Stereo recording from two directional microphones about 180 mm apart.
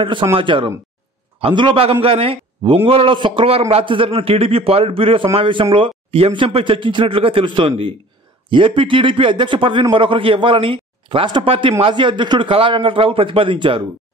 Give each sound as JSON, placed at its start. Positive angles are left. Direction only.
{"t": 0.0, "sound": "a man's voice", "side_deg": -30}